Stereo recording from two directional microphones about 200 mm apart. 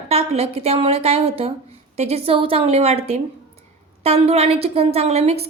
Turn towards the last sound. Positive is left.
turn(degrees=-30)  # may be behind; listen again after turning